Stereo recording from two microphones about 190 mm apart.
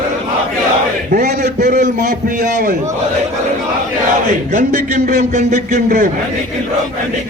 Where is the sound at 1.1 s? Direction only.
40° right (ahead or behind).